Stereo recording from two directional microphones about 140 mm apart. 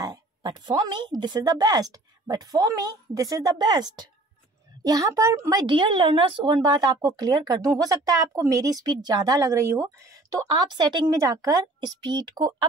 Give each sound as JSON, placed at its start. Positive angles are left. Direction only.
{"t": 0.0, "sound": "a woman's voice", "side_deg": -30}